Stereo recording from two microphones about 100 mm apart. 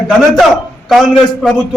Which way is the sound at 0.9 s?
Centre (ahead or behind).